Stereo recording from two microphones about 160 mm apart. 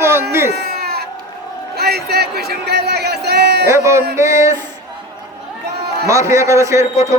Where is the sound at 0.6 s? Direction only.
80° right.